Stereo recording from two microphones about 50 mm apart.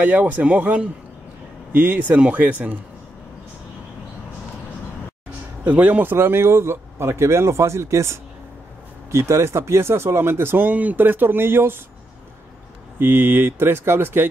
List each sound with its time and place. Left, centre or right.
0.0 s speech: right
5.6 s speech: right
6.1 s speech: right
10.7 s speech: right
13.0 s speech: right